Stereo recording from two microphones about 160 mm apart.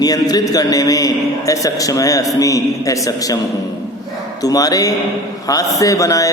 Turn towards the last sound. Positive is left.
turn(degrees=20)  # may be behind; listen again after turning